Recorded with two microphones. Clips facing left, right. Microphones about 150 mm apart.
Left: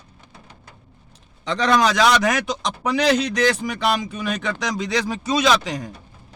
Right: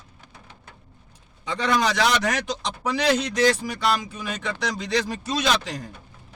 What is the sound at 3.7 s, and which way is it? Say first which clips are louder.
Speech: left 2 dB; 65° left (ahead or behind).